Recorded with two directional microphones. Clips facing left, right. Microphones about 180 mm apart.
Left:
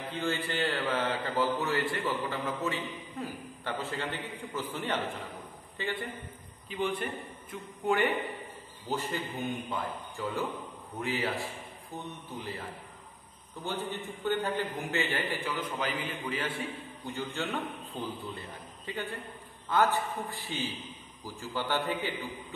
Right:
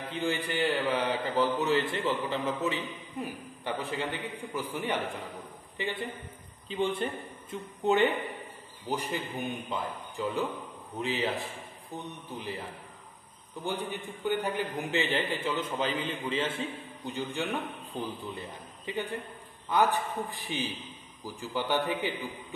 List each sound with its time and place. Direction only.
0.1 s a man's voice: 15° right (ahead or behind)
13.7 s a man's voice: 15° right (ahead or behind)